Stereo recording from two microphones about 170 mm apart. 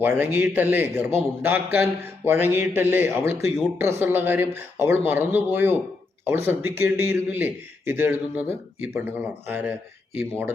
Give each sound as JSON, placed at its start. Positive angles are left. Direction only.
{"t": 0.0, "sound": "a man's voice", "side_deg": -10}